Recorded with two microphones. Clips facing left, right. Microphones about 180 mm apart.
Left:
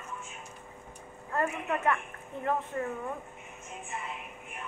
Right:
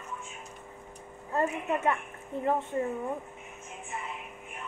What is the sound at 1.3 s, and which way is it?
A woman's voice, 25° right (ahead or behind).